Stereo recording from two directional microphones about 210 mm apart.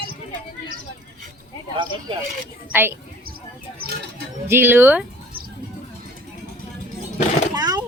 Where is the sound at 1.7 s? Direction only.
25° right (ahead or behind).